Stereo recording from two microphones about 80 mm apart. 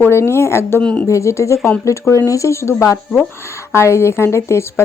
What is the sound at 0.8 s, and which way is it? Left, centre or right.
Speech, centre.